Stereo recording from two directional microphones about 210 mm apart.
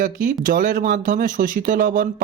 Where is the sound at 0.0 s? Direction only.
40° right (ahead or behind).